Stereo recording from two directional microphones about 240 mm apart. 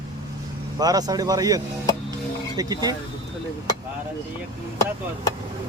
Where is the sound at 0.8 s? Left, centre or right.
Centre.